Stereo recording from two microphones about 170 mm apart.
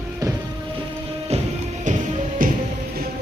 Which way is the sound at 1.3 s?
40° right (ahead or behind).